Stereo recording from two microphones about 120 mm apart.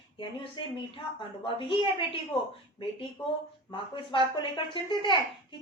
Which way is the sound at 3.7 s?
45° left (ahead or behind).